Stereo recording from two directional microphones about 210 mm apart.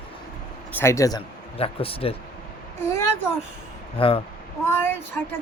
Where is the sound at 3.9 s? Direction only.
25° left (ahead or behind).